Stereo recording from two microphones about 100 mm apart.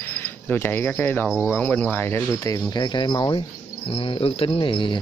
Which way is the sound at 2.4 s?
40° left (ahead or behind).